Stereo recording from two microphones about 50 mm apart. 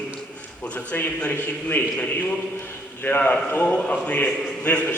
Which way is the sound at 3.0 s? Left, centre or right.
Left.